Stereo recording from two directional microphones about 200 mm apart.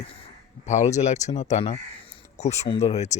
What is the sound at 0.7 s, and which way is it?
Speech, 35° left (ahead or behind).